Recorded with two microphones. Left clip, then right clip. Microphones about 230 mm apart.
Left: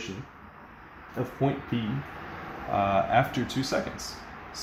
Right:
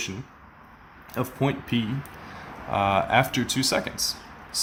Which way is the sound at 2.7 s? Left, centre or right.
Centre.